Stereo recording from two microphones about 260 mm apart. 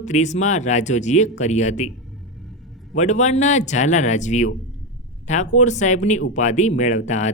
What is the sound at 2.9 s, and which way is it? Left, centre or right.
Speech, left.